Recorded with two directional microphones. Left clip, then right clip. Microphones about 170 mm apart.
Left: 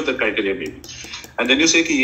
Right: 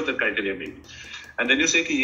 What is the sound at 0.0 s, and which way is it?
A man's voice, 30° left (ahead or behind).